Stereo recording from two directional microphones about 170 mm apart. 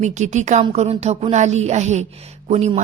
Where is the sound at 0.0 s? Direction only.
45° right (ahead or behind).